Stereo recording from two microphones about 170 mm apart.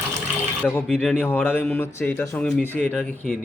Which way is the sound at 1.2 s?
15° left (ahead or behind).